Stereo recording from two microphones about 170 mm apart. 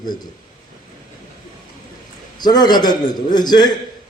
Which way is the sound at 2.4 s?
25° left (ahead or behind).